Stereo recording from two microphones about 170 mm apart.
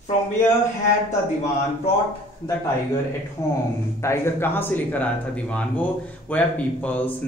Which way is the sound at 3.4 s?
15° left (ahead or behind).